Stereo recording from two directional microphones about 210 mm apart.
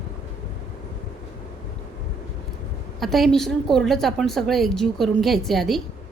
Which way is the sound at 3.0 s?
Centre (ahead or behind).